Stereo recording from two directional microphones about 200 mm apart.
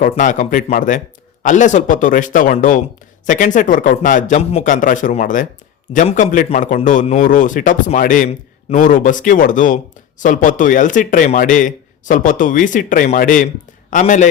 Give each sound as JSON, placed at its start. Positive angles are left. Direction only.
{"t": 0.0, "sound": "a man's voice", "side_deg": 40}